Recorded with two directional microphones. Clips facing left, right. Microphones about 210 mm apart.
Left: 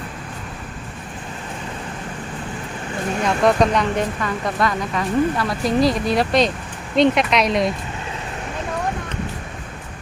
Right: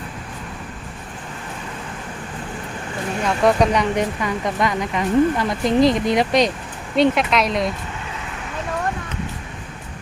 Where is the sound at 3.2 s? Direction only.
10° right (ahead or behind).